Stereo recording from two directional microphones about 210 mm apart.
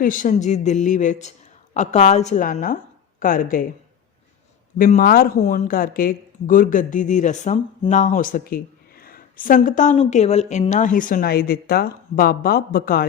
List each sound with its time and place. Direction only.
0.0 s a woman's voice: 40° left (ahead or behind)
4.8 s a woman's voice: 45° left (ahead or behind)